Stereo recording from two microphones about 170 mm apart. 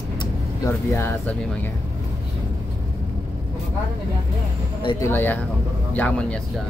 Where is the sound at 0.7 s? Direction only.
15° left (ahead or behind).